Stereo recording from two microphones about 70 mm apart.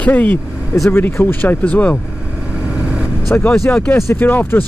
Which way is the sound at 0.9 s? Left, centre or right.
Left.